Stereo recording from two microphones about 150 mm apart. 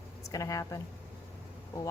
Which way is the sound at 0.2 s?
20° left (ahead or behind).